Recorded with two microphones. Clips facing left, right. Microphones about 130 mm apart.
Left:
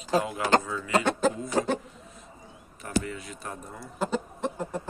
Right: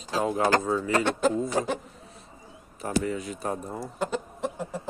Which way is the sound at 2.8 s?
40° right (ahead or behind).